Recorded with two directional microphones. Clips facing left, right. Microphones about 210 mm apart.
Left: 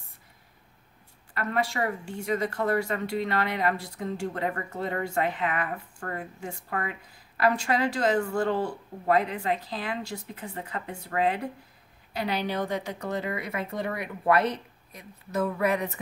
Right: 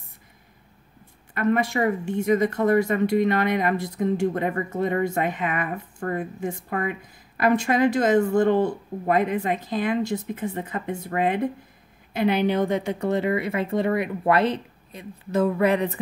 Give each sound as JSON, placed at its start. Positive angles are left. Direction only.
{"t": 1.3, "sound": "speech", "side_deg": -20}